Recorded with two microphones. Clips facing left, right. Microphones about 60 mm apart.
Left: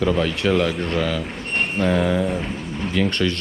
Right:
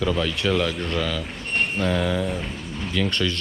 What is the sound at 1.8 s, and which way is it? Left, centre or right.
Speech, left.